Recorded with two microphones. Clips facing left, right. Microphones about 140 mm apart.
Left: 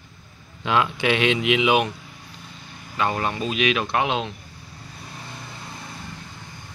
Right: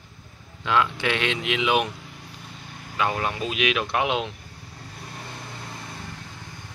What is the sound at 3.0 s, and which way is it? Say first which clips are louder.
Speech: left 1 dB; 5° right (ahead or behind).